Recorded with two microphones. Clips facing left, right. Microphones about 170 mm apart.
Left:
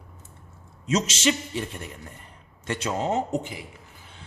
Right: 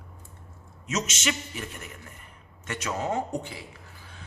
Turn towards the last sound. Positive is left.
turn(degrees=20)  # may be behind; listen again after turning